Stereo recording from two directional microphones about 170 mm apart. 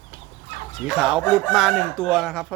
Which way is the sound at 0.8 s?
Centre (ahead or behind).